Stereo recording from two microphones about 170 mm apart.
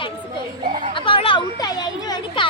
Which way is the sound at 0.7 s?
50° right (ahead or behind).